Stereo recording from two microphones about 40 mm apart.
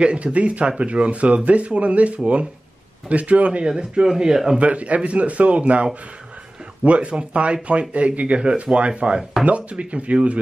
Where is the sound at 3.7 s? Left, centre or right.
Right.